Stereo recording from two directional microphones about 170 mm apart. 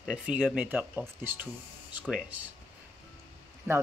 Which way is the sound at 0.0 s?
5° right (ahead or behind).